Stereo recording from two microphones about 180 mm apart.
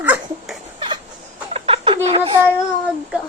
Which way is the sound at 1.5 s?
30° right (ahead or behind).